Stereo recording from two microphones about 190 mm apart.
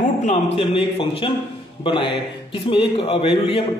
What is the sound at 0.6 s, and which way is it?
A man's voice, 30° left (ahead or behind).